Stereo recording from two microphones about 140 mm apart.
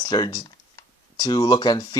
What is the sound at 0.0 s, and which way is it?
Speech, 30° left (ahead or behind).